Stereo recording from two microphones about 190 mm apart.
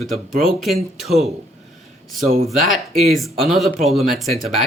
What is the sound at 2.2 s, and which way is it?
Speech, 30° right (ahead or behind).